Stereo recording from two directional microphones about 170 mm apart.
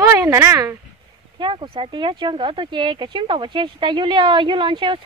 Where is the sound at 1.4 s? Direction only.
30° right (ahead or behind).